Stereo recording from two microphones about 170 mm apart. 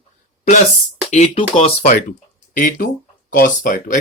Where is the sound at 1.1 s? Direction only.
40° left (ahead or behind).